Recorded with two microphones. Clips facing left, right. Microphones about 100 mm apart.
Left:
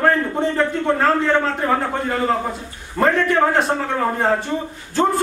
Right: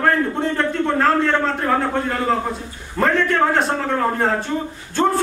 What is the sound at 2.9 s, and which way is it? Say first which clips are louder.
A man's voice: left 1 dB; 5° left (ahead or behind).